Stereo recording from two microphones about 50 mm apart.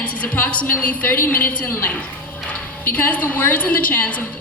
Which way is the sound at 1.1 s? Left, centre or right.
Left.